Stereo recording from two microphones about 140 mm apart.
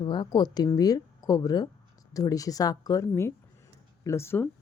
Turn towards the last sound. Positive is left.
turn(degrees=15)  # may be behind; listen again after turning